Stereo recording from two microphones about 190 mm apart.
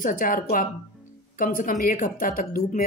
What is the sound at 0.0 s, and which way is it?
Speech, 45° left (ahead or behind).